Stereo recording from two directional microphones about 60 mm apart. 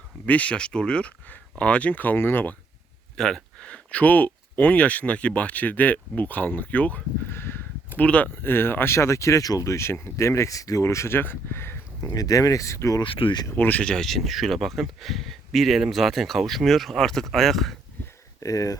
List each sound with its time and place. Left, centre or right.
0.3 s speech: left
3.2 s a sound: centre
3.7 s speech: left
7.3 s a sound: left
7.9 s speech: left
8.4 s speech: left
9.0 s speech: left
9.7 s speech: left
11.2 s speech: left
11.9 s speech: left
13.6 s speech: left
13.8 s speech: centre
18.3 s speech: left